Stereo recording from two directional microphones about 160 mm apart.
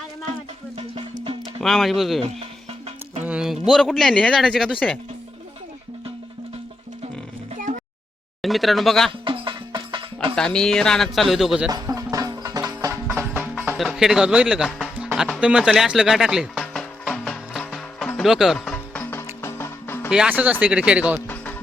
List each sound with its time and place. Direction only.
0.8 s music: 35° right (ahead or behind)
1.6 s speech: centre (ahead or behind)
2.4 s music: 40° right (ahead or behind)
3.2 s speech: 5° right (ahead or behind)
7.5 s a sound: 45° right (ahead or behind)
8.4 s speech: centre (ahead or behind)
9.2 s music: 30° right (ahead or behind)
10.3 s speech: 5° left (ahead or behind)
11.7 s music: 20° right (ahead or behind); by 20.1 s 15° left (ahead or behind)
20.1 s speech: 5° right (ahead or behind)